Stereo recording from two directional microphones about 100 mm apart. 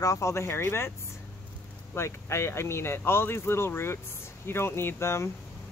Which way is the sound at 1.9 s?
25° left (ahead or behind).